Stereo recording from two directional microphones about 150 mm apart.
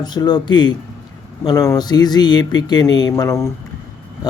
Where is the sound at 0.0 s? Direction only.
25° left (ahead or behind).